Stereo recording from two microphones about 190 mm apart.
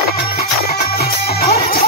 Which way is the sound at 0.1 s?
55° left (ahead or behind).